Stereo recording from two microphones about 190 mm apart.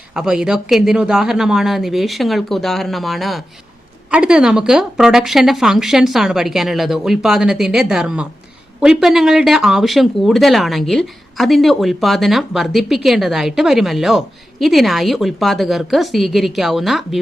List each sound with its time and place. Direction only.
0.1 s speech: 5° right (ahead or behind)